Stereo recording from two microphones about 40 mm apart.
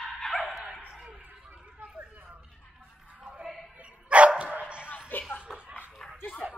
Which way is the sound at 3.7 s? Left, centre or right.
Right.